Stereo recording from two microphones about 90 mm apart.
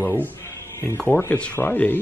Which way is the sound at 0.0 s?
20° left (ahead or behind).